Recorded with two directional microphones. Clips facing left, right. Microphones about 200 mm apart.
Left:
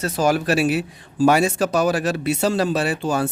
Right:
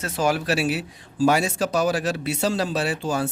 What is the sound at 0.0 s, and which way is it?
A man's voice, 45° left (ahead or behind).